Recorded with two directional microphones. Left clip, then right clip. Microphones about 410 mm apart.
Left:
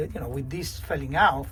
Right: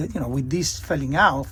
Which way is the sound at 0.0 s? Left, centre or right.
Centre.